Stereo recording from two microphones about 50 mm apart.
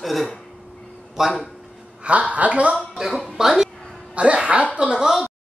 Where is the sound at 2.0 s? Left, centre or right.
Right.